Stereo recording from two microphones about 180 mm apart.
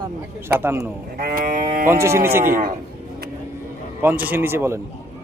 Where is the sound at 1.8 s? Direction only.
15° right (ahead or behind).